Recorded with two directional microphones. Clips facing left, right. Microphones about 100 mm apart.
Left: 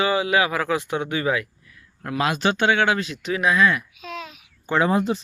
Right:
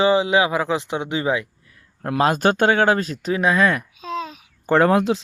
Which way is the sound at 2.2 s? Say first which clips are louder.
Right 4 dB; 45° right (ahead or behind).